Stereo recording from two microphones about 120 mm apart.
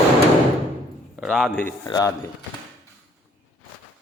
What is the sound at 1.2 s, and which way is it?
Speech, 5° left (ahead or behind).